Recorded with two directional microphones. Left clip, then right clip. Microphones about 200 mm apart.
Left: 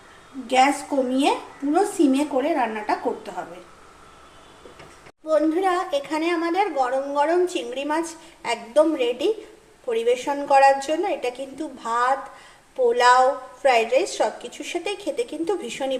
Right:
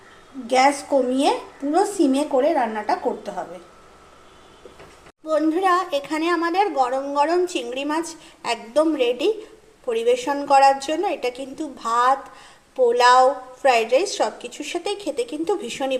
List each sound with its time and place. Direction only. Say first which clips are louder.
0.4 s a woman's voice: right 1 dB; 15° right (ahead or behind)
1.7 s a woman's voice: right 1 dB; 15° right (ahead or behind)
5.2 s a woman's voice: even; 25° right (ahead or behind)